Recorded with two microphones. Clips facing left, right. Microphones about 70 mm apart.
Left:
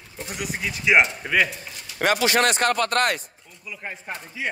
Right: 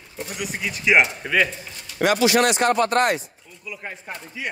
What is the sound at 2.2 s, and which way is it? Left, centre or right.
Speech, left.